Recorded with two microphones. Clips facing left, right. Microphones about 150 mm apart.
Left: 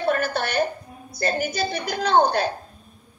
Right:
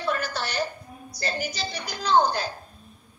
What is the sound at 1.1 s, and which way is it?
A woman's voice, 50° left (ahead or behind).